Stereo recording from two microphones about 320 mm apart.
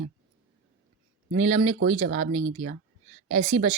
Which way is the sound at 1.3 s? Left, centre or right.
Centre.